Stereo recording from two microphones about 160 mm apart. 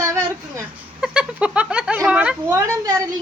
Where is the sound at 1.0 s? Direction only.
5° right (ahead or behind).